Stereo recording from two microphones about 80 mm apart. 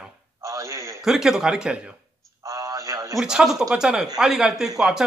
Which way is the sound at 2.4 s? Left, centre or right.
Right.